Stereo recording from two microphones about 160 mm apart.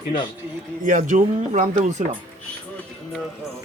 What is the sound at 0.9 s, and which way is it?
Speech, 55° right (ahead or behind).